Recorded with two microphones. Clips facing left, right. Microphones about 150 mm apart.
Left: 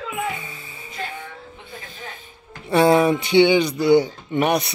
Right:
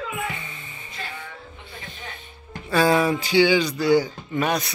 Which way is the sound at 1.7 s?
45° left (ahead or behind).